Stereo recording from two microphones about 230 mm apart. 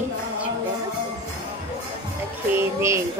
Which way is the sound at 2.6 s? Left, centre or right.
Centre.